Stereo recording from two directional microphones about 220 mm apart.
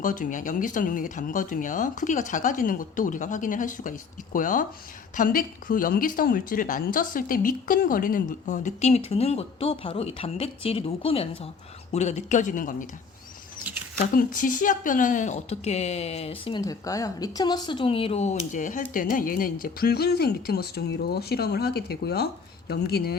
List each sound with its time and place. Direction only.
0.0 s speech: 35° left (ahead or behind)
14.0 s speech: 40° left (ahead or behind)